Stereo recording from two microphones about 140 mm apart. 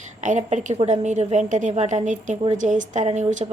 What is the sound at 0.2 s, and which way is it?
A woman's voice, 60° right (ahead or behind).